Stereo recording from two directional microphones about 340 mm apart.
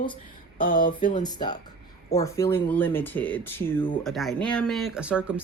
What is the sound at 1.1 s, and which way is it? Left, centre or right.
Speech, centre.